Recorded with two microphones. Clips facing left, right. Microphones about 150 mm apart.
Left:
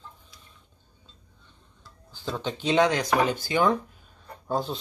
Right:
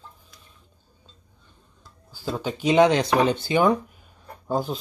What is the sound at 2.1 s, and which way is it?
Speech, 10° right (ahead or behind).